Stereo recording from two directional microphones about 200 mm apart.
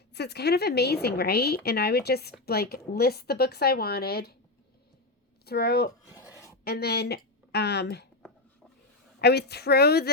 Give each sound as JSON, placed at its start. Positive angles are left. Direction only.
{"t": 0.1, "sound": "a woman's voice", "side_deg": 55}
{"t": 5.5, "sound": "a woman's voice", "side_deg": 50}
{"t": 9.2, "sound": "a woman's voice", "side_deg": 55}